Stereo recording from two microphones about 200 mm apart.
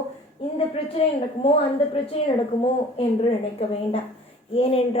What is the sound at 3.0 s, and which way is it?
Speech, 30° left (ahead or behind).